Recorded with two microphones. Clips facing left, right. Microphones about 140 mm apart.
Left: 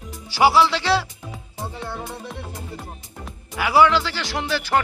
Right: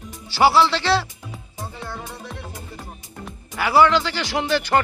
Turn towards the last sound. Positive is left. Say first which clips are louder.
# right 2 dB
turn(degrees=5)  # may be behind; listen again after turning